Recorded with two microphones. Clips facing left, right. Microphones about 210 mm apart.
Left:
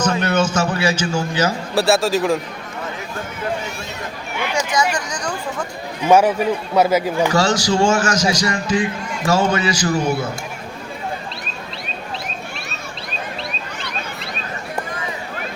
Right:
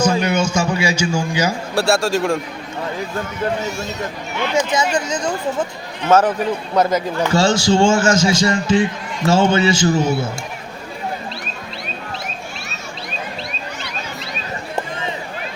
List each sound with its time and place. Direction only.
0.2 s a sound: 10° right (ahead or behind)
1.7 s a man's voice: centre (ahead or behind)
4.5 s a man's voice: 25° right (ahead or behind)
6.0 s a man's voice: 10° left (ahead or behind)
7.3 s a man's voice: 25° right (ahead or behind)
14.8 s run: 25° right (ahead or behind)